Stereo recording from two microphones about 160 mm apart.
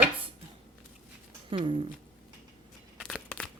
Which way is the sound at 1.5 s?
35° right (ahead or behind).